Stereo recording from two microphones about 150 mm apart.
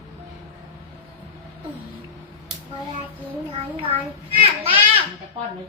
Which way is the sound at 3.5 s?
40° right (ahead or behind).